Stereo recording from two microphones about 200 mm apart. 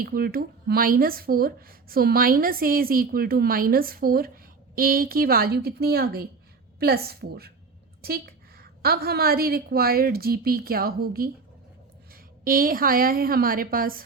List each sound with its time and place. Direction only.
0.0 s speech: 50° right (ahead or behind)